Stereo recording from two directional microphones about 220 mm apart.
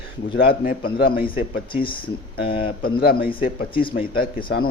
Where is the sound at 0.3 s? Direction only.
40° left (ahead or behind).